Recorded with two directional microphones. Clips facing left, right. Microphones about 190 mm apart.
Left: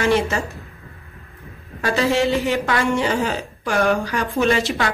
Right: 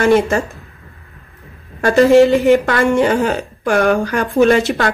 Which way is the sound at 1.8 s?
50° right (ahead or behind).